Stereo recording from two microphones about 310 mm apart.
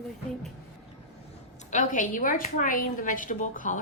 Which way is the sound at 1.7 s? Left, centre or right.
Left.